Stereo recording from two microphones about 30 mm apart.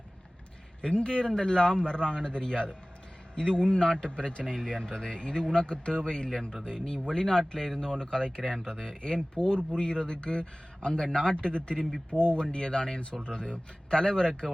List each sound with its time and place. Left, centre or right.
0.8 s a man's voice: left
4.4 s a man's voice: left
8.4 s speech: centre
9.3 s a man's voice: left